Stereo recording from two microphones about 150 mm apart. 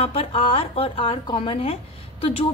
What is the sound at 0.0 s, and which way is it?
A woman's voice, 40° left (ahead or behind).